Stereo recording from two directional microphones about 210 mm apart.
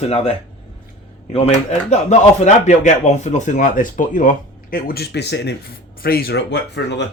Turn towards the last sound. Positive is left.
turn(degrees=55)  # may be behind; listen again after turning